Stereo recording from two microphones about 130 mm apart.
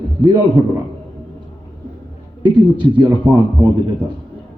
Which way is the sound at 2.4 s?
35° right (ahead or behind).